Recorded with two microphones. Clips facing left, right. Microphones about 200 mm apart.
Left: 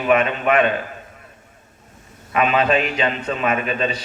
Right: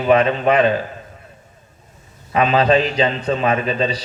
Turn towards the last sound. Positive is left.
turn(degrees=-30)  # may be behind; listen again after turning